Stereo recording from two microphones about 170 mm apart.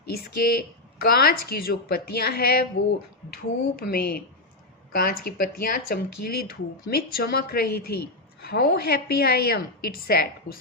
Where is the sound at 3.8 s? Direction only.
65° left (ahead or behind).